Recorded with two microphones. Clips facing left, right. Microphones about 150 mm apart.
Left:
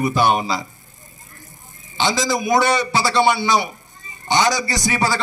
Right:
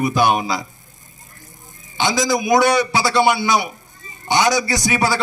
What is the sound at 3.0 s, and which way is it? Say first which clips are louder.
A man's voice: right 1 dB; centre (ahead or behind).